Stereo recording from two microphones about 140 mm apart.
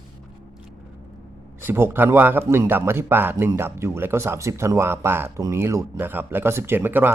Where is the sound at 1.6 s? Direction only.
15° right (ahead or behind).